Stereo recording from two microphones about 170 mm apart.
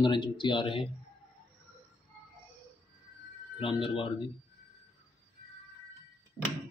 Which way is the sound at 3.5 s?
30° left (ahead or behind).